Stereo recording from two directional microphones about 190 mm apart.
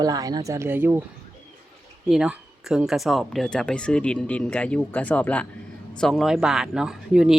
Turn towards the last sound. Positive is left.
turn(degrees=-5)  # may be behind; listen again after turning